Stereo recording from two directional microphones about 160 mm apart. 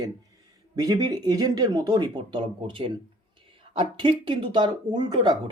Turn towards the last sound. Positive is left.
turn(degrees=-25)  # may be behind; listen again after turning